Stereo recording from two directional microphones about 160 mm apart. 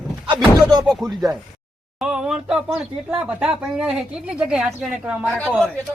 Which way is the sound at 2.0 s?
5° right (ahead or behind).